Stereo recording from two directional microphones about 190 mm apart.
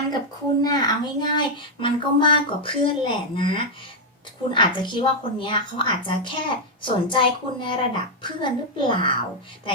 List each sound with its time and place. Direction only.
0.6 s a woman's voice: 20° left (ahead or behind)